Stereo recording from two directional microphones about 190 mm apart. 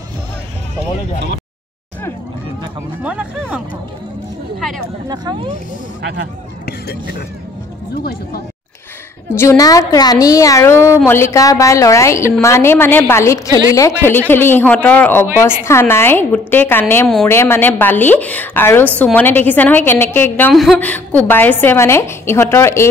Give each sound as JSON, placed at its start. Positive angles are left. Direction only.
{"t": 3.0, "sound": "music", "side_deg": -5}
{"t": 5.1, "sound": "speech", "side_deg": -25}
{"t": 6.6, "sound": "speech", "side_deg": 55}
{"t": 9.3, "sound": "a woman's voice", "side_deg": 15}